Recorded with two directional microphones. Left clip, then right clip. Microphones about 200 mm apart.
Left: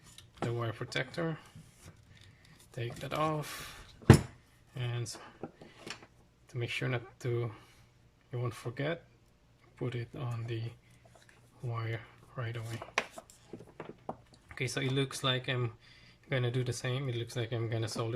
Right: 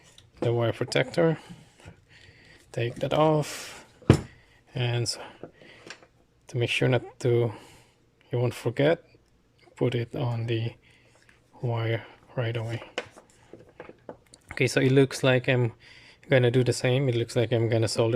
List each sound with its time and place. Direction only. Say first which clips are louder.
0.5 s speech: right 12 dB; 40° right (ahead or behind)
2.7 s speech: right 11 dB; 35° right (ahead or behind)
4.7 s speech: right 12 dB; 45° right (ahead or behind)
6.5 s speech: right 11 dB; 40° right (ahead or behind)
14.4 s speech: right 12 dB; 45° right (ahead or behind)